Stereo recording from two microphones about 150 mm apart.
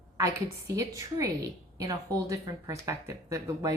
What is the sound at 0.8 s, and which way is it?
Speech, 20° right (ahead or behind).